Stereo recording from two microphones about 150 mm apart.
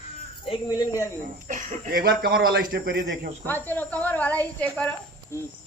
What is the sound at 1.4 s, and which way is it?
Speech, 70° right (ahead or behind).